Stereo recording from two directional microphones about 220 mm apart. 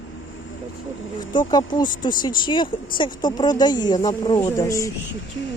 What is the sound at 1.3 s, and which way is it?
Speech, 20° left (ahead or behind).